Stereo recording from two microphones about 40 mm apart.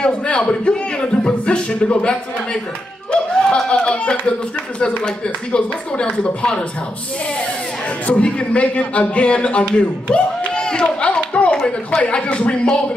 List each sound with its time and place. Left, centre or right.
0.0 s a man's voice: left
8.1 s a man's voice: left
11.5 s speech: left